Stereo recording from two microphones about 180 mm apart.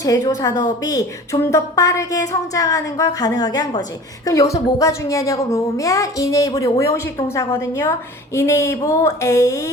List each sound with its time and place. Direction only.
0.0 s a woman's voice: 20° left (ahead or behind)